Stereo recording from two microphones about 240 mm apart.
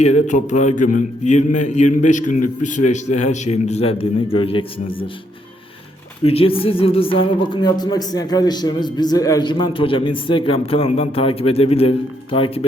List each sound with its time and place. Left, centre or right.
0.0 s speech: left
6.2 s speech: left